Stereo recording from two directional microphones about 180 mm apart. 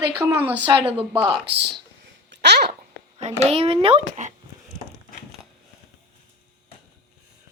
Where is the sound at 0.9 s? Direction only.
30° right (ahead or behind).